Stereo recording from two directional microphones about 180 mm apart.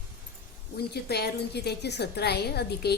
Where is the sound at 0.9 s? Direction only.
65° left (ahead or behind).